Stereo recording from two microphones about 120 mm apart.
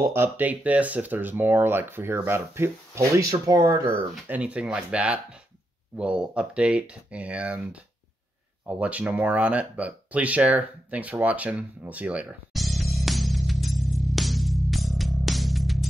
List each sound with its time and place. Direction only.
0.1 s speech: 15° right (ahead or behind)
4.3 s speech: 10° right (ahead or behind)
8.6 s speech: 10° right (ahead or behind)
12.5 s music: centre (ahead or behind)